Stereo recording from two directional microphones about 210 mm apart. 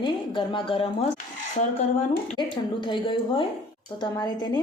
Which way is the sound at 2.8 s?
20° left (ahead or behind).